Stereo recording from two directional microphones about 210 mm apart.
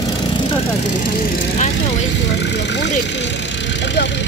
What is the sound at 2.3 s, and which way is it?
Vehicle, 55° left (ahead or behind).